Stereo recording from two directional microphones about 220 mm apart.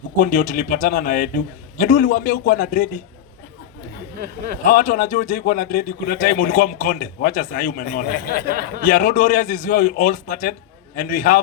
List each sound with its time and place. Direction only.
0.3 s a man's voice: 40° left (ahead or behind)
4.6 s a man's voice: 40° left (ahead or behind)
8.8 s a man's voice: 35° left (ahead or behind)